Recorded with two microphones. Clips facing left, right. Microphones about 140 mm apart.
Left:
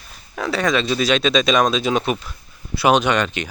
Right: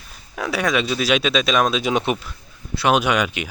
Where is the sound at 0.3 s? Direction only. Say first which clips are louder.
Left 1 dB; 10° right (ahead or behind).